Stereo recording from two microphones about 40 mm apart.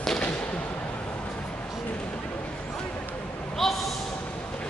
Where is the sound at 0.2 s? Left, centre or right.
Left.